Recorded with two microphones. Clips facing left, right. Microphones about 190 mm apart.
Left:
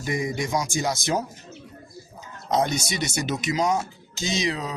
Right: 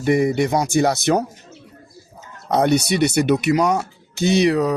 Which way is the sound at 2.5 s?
65° right (ahead or behind).